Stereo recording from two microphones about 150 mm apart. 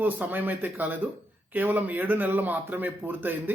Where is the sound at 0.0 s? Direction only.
10° right (ahead or behind).